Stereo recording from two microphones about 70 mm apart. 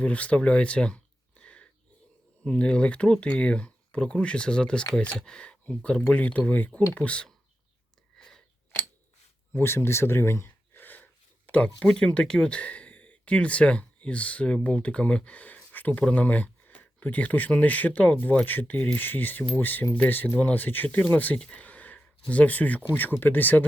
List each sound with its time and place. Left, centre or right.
0.0 s speech: centre
9.5 s a sound: left
11.9 s speech: centre